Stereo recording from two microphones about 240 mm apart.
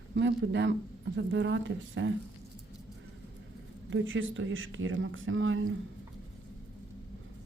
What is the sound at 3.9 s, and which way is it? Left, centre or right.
Speech, right.